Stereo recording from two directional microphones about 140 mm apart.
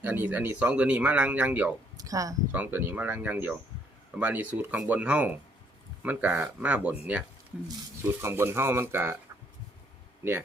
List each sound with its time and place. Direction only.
0.0 s speech: 10° right (ahead or behind)
2.0 s speech: 25° right (ahead or behind)
2.5 s speech: 15° right (ahead or behind)
8.0 s speech: 20° right (ahead or behind)